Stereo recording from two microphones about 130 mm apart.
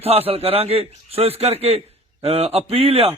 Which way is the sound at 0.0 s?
50° right (ahead or behind).